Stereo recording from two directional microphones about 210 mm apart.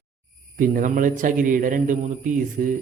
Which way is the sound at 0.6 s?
40° right (ahead or behind).